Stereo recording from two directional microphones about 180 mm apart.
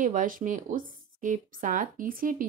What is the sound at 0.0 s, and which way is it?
Speech, 45° right (ahead or behind).